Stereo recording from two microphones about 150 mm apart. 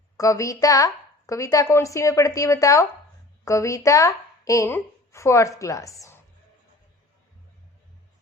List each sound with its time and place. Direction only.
0.2 s a woman's voice: 20° left (ahead or behind)